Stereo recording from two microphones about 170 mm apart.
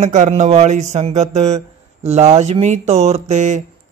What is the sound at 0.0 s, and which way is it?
Speech, 45° right (ahead or behind).